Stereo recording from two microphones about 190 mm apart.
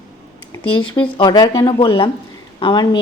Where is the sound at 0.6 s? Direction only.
90° left.